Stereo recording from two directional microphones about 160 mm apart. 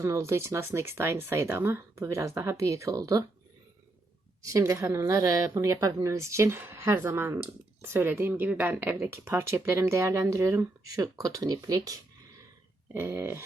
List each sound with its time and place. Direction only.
0.0 s a woman's voice: 20° right (ahead or behind)
4.4 s a woman's voice: 20° right (ahead or behind)